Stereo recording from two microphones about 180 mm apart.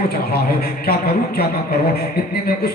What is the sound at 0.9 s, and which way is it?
Speech, 60° left (ahead or behind).